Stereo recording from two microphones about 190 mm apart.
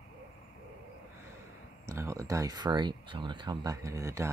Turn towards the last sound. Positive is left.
turn(degrees=-15)  # may be behind; listen again after turning